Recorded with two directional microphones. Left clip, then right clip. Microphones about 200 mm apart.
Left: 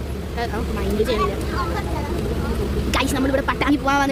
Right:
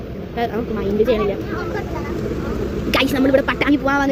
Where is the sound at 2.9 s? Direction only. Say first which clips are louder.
Right 6 dB; centre (ahead or behind).